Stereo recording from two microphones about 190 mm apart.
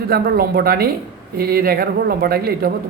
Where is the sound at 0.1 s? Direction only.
55° right (ahead or behind).